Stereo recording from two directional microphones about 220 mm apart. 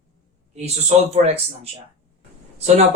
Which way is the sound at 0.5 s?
30° right (ahead or behind).